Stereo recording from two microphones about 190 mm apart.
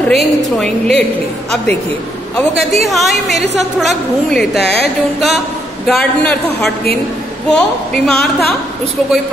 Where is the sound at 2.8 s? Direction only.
Centre (ahead or behind).